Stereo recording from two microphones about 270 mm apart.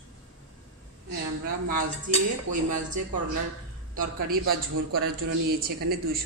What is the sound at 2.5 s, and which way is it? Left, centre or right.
Speech, right.